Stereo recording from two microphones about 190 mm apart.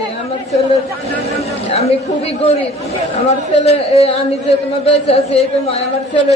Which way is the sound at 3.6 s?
35° left (ahead or behind).